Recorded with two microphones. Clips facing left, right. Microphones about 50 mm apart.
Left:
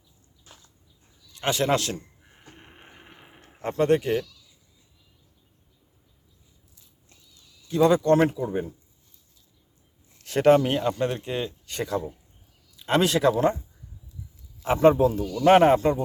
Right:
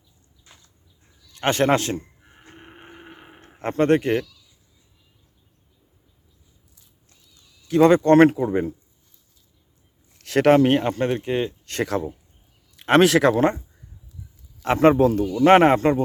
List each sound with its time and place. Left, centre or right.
1.3 s a man's voice: right
2.6 s a sound: centre
3.6 s speech: right
4.2 s a sound: centre
7.7 s speech: right
10.2 s speech: right
10.6 s speech: right
11.6 s speech: right
14.6 s speech: right
15.4 s speech: right